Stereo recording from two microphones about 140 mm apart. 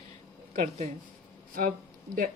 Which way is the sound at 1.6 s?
90° right.